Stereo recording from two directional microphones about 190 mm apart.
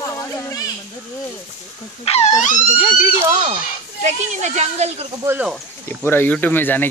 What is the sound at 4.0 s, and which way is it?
Speech, 40° right (ahead or behind).